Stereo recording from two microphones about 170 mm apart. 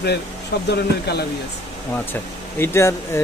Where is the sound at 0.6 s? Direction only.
75° left (ahead or behind).